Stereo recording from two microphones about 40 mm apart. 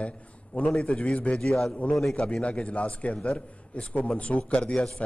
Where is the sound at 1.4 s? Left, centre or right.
Centre.